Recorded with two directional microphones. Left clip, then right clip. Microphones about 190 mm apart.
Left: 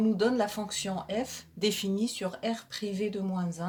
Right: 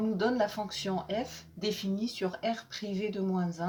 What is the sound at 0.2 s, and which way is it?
Speech, 50° left (ahead or behind).